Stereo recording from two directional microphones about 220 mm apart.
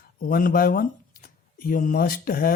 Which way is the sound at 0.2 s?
40° left (ahead or behind).